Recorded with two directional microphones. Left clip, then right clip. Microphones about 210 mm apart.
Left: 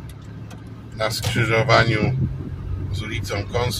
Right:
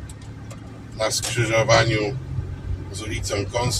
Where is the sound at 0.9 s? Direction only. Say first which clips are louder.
Even; 15° left (ahead or behind).